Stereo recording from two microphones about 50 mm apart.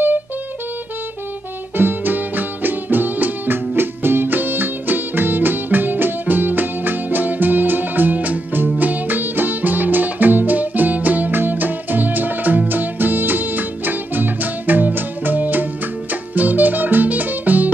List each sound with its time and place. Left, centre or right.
1.8 s music: right